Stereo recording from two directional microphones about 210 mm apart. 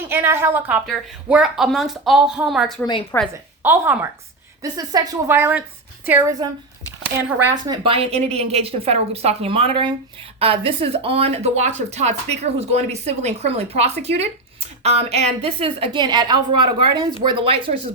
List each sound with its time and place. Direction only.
0.1 s a woman's voice: 10° right (ahead or behind)
2.8 s a woman's voice: 25° left (ahead or behind)
3.6 s a woman's voice: 10° right (ahead or behind)
7.5 s speech: 25° right (ahead or behind)